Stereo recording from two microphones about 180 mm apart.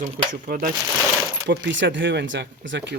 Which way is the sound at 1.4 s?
90° right.